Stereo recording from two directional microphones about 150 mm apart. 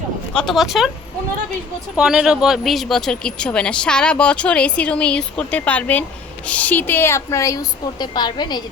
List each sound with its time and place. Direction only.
0.3 s speech: centre (ahead or behind)
2.0 s a woman's voice: 5° right (ahead or behind); by 8.6 s 30° left (ahead or behind)